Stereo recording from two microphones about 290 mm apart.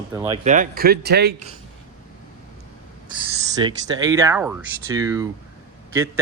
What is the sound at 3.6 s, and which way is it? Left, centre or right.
Speech, centre.